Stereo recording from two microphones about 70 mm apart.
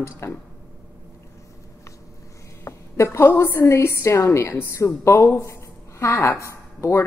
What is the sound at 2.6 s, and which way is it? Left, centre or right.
A woman's voice, left.